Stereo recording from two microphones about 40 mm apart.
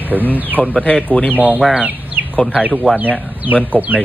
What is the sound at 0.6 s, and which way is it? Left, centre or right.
Speech, left.